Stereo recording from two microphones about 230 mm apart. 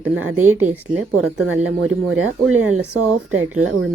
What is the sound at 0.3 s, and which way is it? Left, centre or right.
Speech, right.